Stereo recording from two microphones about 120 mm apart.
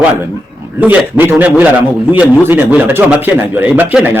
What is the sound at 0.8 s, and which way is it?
A man's voice, 15° right (ahead or behind).